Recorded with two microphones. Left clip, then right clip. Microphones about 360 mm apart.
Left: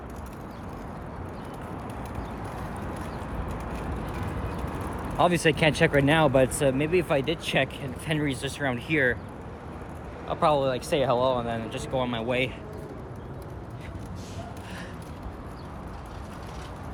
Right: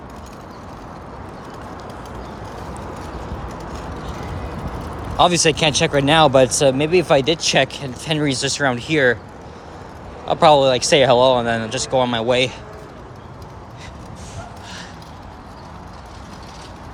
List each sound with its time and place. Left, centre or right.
5.1 s speech: centre
10.2 s speech: centre